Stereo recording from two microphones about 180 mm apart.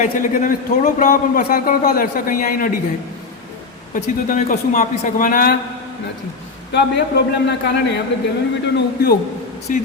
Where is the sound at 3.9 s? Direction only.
45° left (ahead or behind).